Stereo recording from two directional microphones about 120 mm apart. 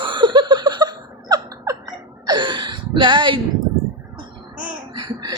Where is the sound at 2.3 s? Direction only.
40° right (ahead or behind).